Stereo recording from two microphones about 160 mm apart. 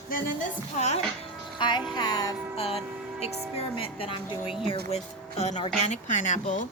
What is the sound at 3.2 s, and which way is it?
A woman's voice, 40° left (ahead or behind).